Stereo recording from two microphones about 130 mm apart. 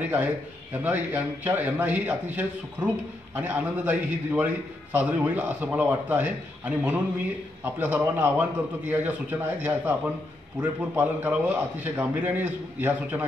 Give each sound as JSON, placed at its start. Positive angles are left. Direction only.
{"t": 0.0, "sound": "a man's voice", "side_deg": -10}